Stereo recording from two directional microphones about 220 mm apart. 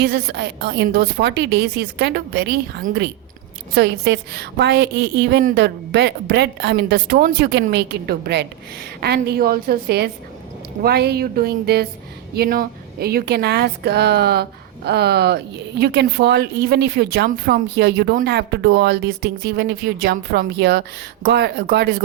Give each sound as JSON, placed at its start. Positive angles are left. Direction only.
{"t": 0.0, "sound": "a woman's voice", "side_deg": -45}